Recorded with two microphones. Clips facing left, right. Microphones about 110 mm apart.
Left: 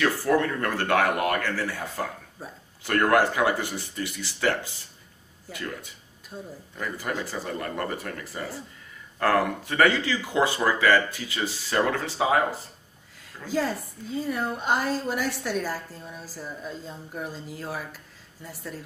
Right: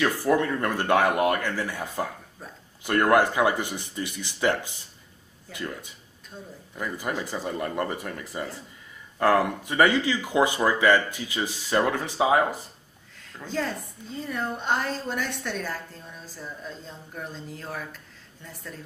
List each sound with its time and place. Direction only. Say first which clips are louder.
0.0 s speech: even; 20° right (ahead or behind)
2.4 s a sound: left 3 dB; 5° left (ahead or behind)
2.8 s speech: right 1 dB; 20° right (ahead or behind)
6.3 s a woman's voice: left 3 dB; 10° left (ahead or behind)
6.7 s speech: right 1 dB; 20° right (ahead or behind)
13.5 s a woman's voice: left 3 dB; 5° left (ahead or behind)